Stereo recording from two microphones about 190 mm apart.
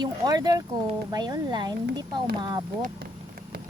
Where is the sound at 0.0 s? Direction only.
20° right (ahead or behind).